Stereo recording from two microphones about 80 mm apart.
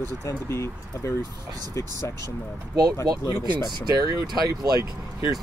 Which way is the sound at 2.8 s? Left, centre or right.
Right.